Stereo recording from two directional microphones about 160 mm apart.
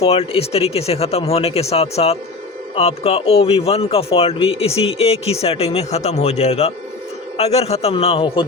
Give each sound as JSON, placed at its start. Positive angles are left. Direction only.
{"t": 0.0, "sound": "speech", "side_deg": 40}